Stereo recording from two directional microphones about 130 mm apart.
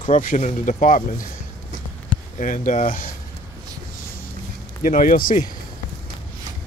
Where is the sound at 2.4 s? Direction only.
85° left.